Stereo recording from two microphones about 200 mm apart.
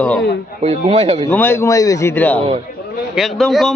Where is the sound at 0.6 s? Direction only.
30° right (ahead or behind).